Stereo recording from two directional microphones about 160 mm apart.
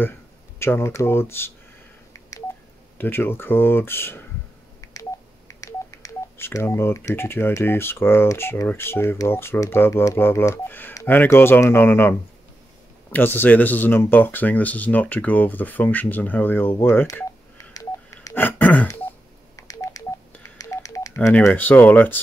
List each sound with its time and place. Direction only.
0.6 s speech: 15° left (ahead or behind)
3.0 s speech: 15° left (ahead or behind)
4.8 s telephone dialing: 20° left (ahead or behind)
5.5 s speech: 20° left (ahead or behind)
17.7 s telephone dialing: 15° left (ahead or behind)
21.3 s speech: 10° left (ahead or behind)